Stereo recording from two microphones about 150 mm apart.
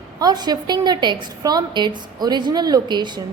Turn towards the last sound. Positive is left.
turn(degrees=-30)  # may be behind; listen again after turning